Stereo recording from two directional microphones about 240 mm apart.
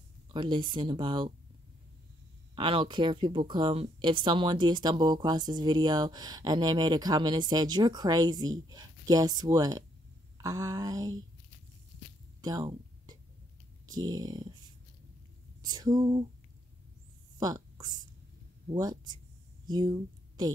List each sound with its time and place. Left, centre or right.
0.3 s speech: centre
2.5 s speech: right
12.4 s a sound: centre
13.8 s speech: centre
15.6 s speech: centre
17.4 s a sound: centre
18.7 s speech: centre